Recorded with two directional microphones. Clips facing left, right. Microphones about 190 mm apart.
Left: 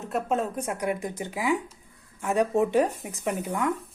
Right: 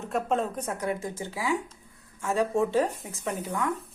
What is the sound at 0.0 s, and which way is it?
Speech, 5° left (ahead or behind).